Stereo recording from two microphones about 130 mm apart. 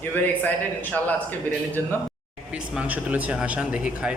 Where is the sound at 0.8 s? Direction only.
15° left (ahead or behind).